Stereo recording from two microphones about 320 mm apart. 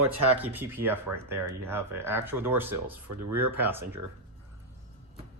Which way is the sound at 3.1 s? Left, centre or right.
Right.